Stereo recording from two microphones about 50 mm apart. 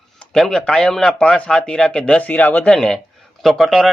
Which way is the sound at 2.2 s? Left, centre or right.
Left.